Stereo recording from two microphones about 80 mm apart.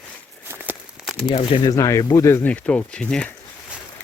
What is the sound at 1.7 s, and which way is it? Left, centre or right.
Speech, left.